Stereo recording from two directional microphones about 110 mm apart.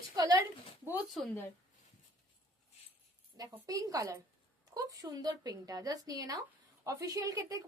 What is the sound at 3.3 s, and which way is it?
A woman's voice, 35° right (ahead or behind).